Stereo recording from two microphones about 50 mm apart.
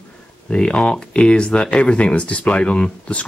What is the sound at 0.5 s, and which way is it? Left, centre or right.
Speech, left.